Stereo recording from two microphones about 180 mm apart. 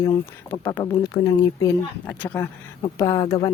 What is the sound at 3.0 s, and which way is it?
Speech, 20° left (ahead or behind).